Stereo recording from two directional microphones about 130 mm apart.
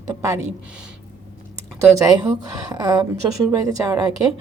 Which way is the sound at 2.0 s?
30° right (ahead or behind).